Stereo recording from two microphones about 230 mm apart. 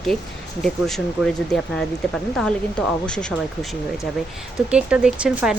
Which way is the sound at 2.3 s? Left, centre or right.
Centre.